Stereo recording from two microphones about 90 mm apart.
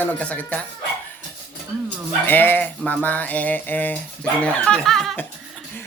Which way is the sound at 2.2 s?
25° left (ahead or behind).